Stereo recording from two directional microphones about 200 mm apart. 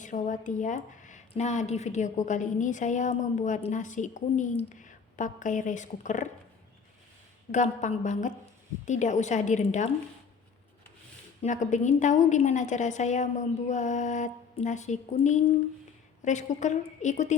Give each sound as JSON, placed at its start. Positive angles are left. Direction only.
{"t": 0.0, "sound": "speech", "side_deg": 40}
{"t": 7.5, "sound": "speech", "side_deg": 35}
{"t": 11.4, "sound": "speech", "side_deg": 35}